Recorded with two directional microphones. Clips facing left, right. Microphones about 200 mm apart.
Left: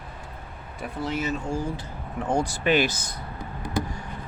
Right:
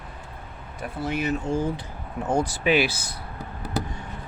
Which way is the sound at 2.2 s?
5° right (ahead or behind).